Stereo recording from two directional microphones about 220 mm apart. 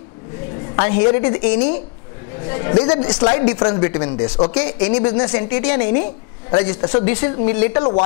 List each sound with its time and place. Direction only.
0.7 s a woman's voice: 15° left (ahead or behind)
2.4 s a man's voice: 20° left (ahead or behind)
7.1 s a woman's voice: 10° left (ahead or behind)
7.3 s a man's voice: 25° left (ahead or behind)